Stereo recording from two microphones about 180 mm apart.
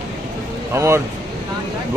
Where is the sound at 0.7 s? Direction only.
15° right (ahead or behind).